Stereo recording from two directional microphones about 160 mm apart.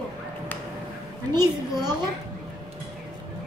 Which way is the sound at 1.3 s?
25° right (ahead or behind).